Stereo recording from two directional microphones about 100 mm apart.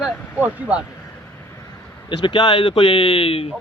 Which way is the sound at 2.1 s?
50° left (ahead or behind).